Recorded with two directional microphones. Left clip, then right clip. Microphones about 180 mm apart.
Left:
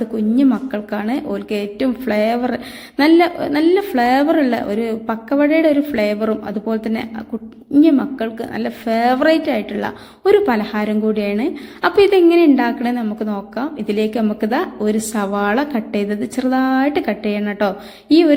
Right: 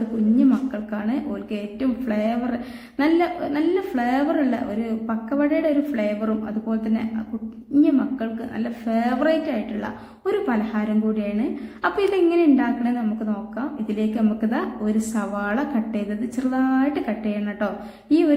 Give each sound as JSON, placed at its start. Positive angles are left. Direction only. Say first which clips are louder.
{"t": 0.3, "sound": "a woman's voice", "louder": "left 5 dB", "side_deg": 40}